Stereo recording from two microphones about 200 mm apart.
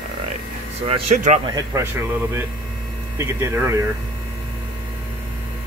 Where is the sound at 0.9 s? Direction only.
30° right (ahead or behind).